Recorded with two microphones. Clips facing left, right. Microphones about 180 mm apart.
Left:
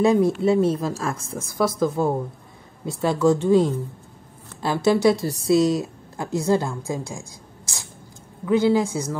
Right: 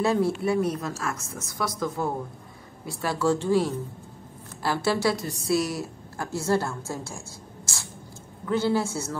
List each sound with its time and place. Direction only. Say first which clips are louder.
0.0 s a woman's voice: left 6 dB; 20° left (ahead or behind)